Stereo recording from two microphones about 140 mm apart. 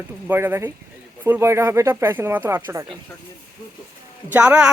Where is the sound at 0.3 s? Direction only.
15° right (ahead or behind).